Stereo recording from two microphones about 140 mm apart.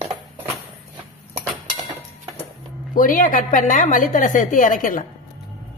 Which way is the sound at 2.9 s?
75° left (ahead or behind).